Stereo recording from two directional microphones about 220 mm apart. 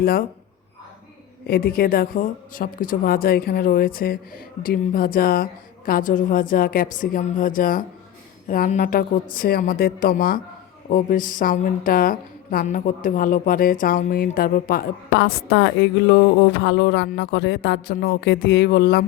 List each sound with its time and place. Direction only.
0.0 s speech: 45° left (ahead or behind)
1.5 s speech: 40° left (ahead or behind)